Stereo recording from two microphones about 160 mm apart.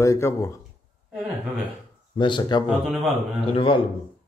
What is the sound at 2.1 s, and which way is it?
A man's voice, 30° left (ahead or behind).